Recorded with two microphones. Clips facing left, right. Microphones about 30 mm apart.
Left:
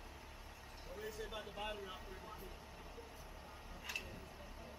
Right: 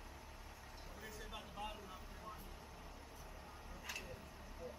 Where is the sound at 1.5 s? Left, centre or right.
Left.